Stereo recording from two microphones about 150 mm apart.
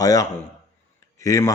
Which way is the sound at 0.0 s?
25° left (ahead or behind).